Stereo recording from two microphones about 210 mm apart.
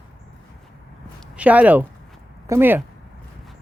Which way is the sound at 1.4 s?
5° right (ahead or behind).